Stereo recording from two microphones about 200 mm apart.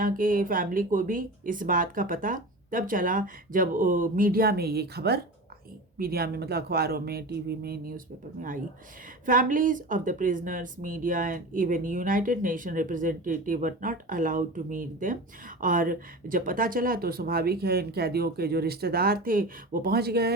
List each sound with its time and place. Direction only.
0.0 s speech: 45° right (ahead or behind)